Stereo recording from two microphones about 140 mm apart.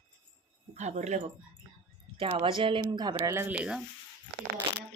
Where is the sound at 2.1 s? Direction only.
40° right (ahead or behind).